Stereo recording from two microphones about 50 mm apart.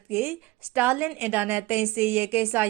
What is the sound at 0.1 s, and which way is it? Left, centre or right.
A woman's voice, right.